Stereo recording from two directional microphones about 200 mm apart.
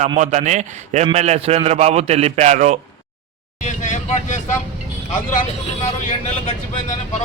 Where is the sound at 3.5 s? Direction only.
40° left (ahead or behind).